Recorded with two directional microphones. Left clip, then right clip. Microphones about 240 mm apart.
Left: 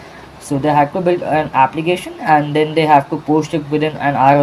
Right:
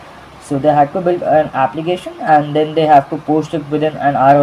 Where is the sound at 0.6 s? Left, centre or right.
Centre.